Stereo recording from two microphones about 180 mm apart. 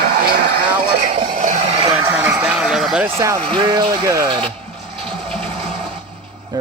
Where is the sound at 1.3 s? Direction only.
45° right (ahead or behind).